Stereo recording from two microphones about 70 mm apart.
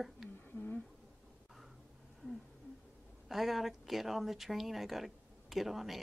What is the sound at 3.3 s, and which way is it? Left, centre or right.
Speech, centre.